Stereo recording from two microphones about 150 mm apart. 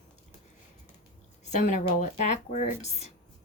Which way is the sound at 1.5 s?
55° left (ahead or behind).